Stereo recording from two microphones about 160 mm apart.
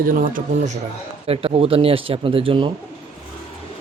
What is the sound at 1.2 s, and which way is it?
Speech, 35° right (ahead or behind).